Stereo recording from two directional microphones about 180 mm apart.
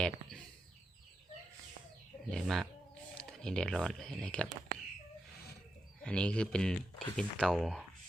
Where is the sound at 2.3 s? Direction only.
Centre (ahead or behind).